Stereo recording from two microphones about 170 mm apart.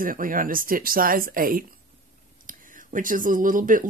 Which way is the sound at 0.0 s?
55° right (ahead or behind).